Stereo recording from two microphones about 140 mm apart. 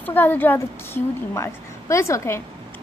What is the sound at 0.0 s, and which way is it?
A woman's voice, 15° left (ahead or behind).